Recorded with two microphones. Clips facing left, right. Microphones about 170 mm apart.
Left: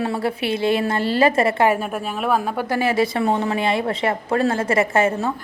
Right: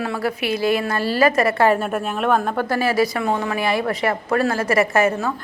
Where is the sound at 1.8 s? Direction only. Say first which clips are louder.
Right 2 dB; centre (ahead or behind); by 5.3 s 25° left (ahead or behind).